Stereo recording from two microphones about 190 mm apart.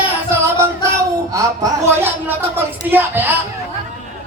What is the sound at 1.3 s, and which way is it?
Speech, 15° right (ahead or behind).